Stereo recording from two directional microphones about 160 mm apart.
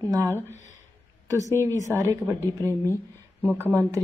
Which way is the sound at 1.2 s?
20° right (ahead or behind).